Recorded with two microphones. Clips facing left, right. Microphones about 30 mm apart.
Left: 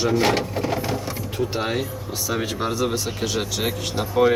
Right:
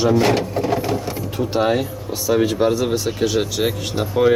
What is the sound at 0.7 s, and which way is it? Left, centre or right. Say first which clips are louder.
Printer: right 4 dB; centre.